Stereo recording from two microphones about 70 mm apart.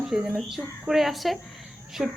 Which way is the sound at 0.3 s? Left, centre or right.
Centre.